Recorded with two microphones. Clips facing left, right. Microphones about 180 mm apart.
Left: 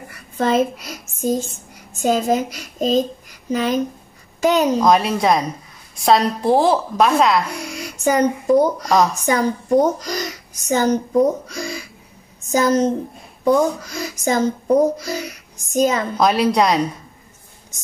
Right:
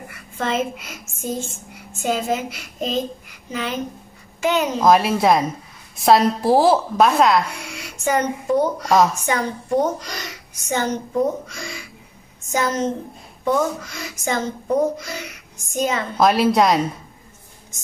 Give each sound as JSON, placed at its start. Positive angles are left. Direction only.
{"t": 0.1, "sound": "a woman's voice", "side_deg": 35}
{"t": 4.7, "sound": "a woman's voice", "side_deg": -5}
{"t": 7.5, "sound": "a child's voice", "side_deg": 40}
{"t": 8.8, "sound": "a woman's voice", "side_deg": 0}
{"t": 9.2, "sound": "speech", "side_deg": 40}
{"t": 16.2, "sound": "a woman's voice", "side_deg": 0}